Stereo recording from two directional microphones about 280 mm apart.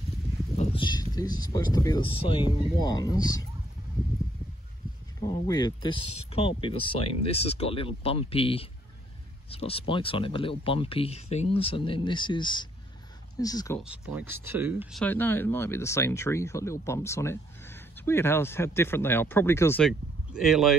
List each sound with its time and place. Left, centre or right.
0.6 s a sound: centre
1.1 s speech: centre
5.2 s speech: centre
13.7 s speech: centre